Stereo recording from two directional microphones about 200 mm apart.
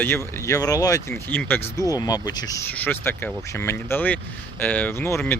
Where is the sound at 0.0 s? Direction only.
15° left (ahead or behind).